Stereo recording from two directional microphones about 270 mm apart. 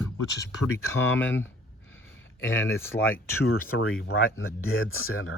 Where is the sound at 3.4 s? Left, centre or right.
Left.